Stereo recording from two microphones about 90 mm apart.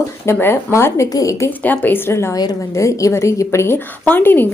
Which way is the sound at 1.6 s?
20° left (ahead or behind).